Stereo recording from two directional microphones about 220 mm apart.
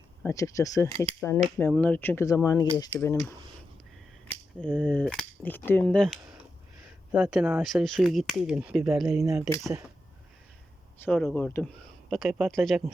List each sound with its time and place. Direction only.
0.2 s speech: 15° left (ahead or behind)
0.9 s speech: 25° right (ahead or behind)
1.5 s speech: 10° left (ahead or behind)
4.8 s speech: 5° left (ahead or behind)
9.2 s speech: 15° right (ahead or behind)
11.0 s speech: 5° left (ahead or behind)